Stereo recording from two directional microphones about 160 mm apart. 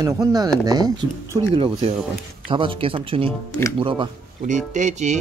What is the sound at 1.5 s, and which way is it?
Speech, 35° right (ahead or behind).